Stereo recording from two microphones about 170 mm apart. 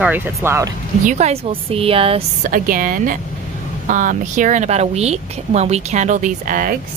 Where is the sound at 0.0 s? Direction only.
10° right (ahead or behind).